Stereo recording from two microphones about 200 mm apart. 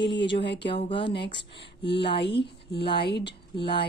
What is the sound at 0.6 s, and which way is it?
Speech, 25° left (ahead or behind).